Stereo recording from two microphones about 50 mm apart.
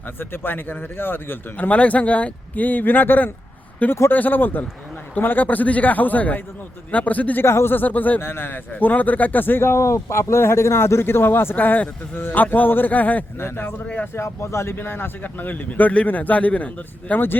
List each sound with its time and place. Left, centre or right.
0.2 s speech: left
1.5 s speech: left
7.4 s speech: left
7.8 s speech: left
8.2 s speech: left
11.5 s speech: left
13.4 s speech: left
13.8 s speech: left
14.1 s speech: left
14.8 s speech: left